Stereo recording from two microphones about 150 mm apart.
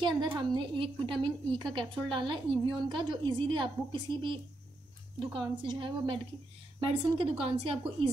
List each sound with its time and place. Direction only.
0.0 s a woman's voice: 30° right (ahead or behind)